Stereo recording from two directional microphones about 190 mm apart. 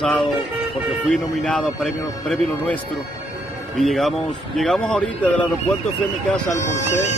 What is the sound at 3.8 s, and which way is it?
Speech, centre (ahead or behind).